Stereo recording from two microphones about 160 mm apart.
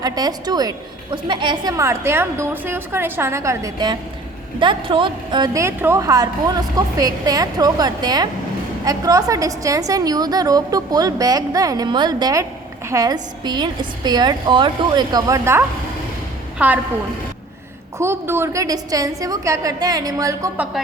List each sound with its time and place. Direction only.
0.0 s a woman's voice: 25° right (ahead or behind)
17.9 s a woman's voice: 15° right (ahead or behind)